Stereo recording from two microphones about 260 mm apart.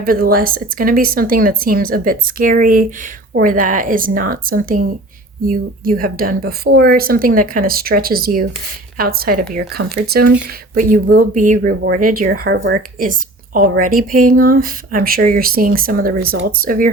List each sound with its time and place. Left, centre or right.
0.0 s speech: right